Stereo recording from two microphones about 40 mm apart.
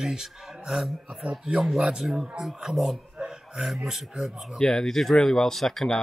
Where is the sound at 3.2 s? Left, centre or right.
Centre.